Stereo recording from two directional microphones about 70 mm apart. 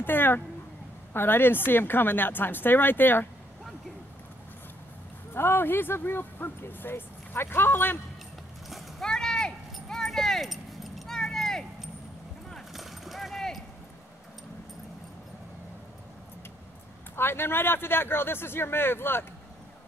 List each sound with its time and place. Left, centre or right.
0.0 s a sound: left
1.1 s speech: left
5.3 s speech: left
8.6 s clip-clop: centre
9.1 s a sound: centre
12.4 s clip-clop: centre
17.1 s speech: left